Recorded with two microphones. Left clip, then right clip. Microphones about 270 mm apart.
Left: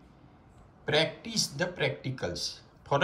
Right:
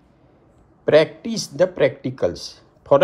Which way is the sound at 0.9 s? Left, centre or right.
Centre.